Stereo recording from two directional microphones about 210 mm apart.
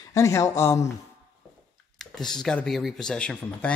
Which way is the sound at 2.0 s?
Centre (ahead or behind).